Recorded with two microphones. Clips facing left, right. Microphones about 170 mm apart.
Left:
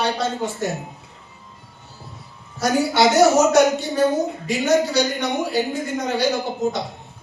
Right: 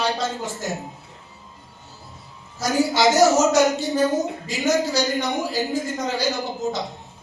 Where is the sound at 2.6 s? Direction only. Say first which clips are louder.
Left 1 dB; 60° left (ahead or behind).